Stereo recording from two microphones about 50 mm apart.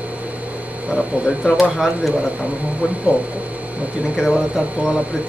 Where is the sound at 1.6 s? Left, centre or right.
Centre.